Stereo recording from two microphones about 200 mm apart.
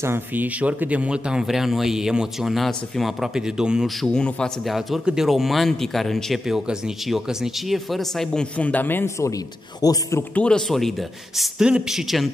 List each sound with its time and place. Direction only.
0.0 s speech: 10° right (ahead or behind); by 10.2 s 20° left (ahead or behind)
10.3 s speech: 5° left (ahead or behind)